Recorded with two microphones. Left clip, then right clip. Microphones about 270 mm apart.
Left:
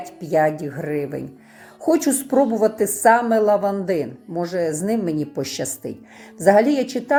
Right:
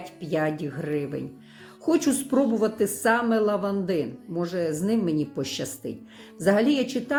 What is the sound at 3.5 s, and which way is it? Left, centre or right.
Speech, left.